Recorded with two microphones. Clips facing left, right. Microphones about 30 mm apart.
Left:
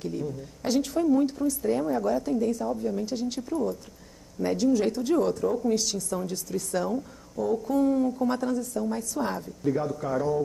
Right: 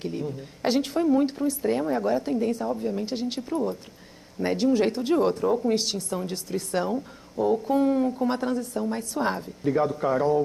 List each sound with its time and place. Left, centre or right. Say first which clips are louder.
0.0 s speech: right 1 dB; right